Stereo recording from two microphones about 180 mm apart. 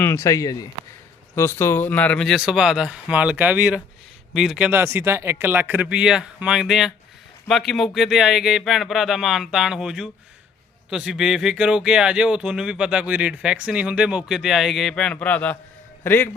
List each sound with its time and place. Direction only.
0.0 s speech: 15° left (ahead or behind)